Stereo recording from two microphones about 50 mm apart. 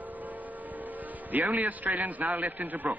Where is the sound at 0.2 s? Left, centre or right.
Right.